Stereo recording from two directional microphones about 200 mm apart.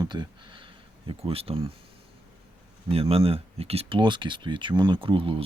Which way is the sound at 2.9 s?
30° right (ahead or behind).